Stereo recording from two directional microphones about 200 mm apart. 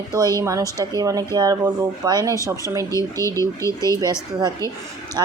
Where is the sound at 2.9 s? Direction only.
15° left (ahead or behind).